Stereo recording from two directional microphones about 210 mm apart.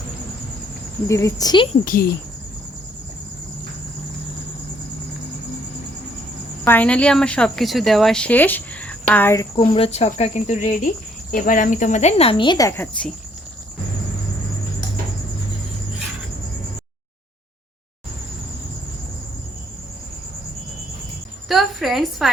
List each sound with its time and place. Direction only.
1.0 s speech: 15° left (ahead or behind)
1.8 s speech: 40° left (ahead or behind)
6.7 s speech: 5° left (ahead or behind)
9.6 s speech: 30° left (ahead or behind); by 13.1 s 5° left (ahead or behind)
21.4 s a sound: centre (ahead or behind)